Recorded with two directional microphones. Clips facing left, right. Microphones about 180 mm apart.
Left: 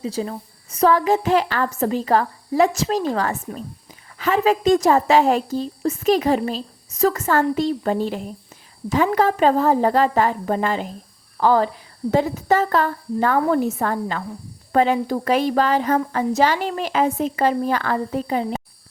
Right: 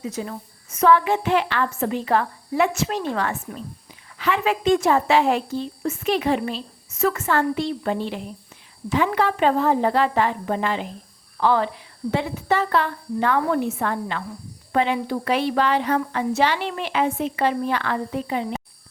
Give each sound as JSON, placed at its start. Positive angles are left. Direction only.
{"t": 0.0, "sound": "a woman's voice", "side_deg": 30}